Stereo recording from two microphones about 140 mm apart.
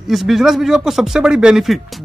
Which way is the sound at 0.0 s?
Centre (ahead or behind).